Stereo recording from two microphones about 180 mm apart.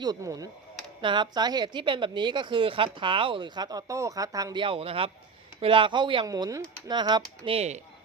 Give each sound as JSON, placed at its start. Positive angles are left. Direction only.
{"t": 0.0, "sound": "a woman's voice", "side_deg": -20}